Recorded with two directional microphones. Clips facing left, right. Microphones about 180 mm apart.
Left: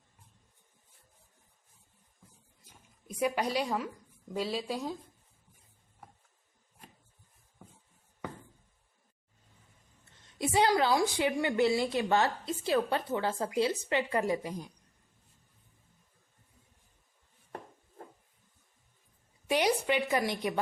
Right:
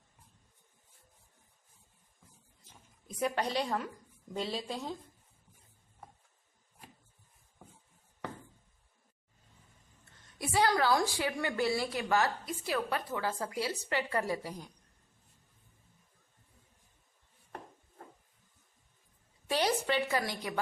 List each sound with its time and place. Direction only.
3.2 s a woman's voice: 10° left (ahead or behind)
10.3 s speech: 20° left (ahead or behind)
19.5 s a woman's voice: 15° left (ahead or behind)